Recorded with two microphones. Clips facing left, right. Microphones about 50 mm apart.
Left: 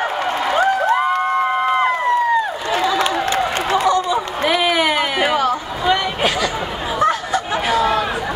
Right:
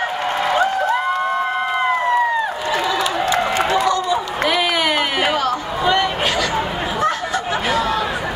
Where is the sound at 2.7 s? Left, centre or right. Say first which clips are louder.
Left 3 dB; left.